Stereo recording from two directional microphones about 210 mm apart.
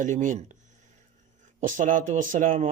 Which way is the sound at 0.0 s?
35° right (ahead or behind).